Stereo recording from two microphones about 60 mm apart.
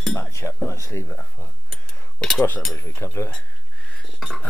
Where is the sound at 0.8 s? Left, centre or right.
Left.